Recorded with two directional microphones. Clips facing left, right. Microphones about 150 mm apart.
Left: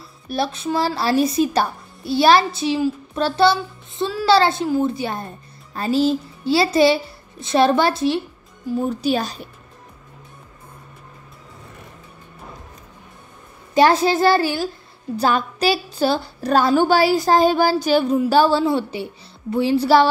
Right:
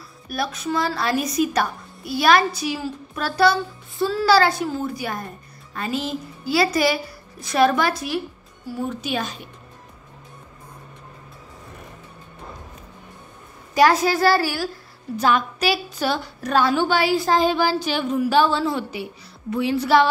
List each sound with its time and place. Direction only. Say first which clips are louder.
0.3 s a woman's voice: left 3 dB; 30° left (ahead or behind)
13.7 s a woman's voice: left 2 dB; 25° left (ahead or behind)
15.1 s a woman's voice: left 1 dB; 35° left (ahead or behind)